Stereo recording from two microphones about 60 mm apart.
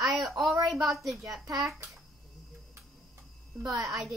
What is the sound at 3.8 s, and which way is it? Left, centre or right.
Speech, centre.